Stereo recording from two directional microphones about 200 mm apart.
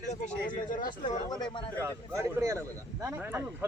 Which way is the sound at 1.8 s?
15° right (ahead or behind).